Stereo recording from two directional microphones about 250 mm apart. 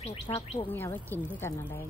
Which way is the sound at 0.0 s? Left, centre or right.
Left.